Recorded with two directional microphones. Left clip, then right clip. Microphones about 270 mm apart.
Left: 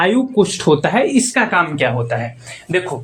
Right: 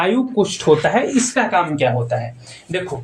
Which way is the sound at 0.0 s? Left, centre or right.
Left.